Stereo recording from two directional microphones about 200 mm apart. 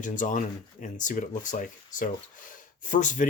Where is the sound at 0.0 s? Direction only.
40° left (ahead or behind).